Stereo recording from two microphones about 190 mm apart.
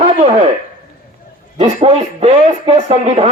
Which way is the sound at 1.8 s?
30° right (ahead or behind).